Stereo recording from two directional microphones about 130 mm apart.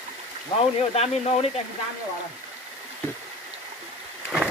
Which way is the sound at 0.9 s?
50° left (ahead or behind).